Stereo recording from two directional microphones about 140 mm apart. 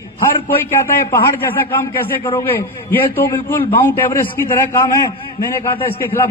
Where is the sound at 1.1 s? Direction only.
15° left (ahead or behind).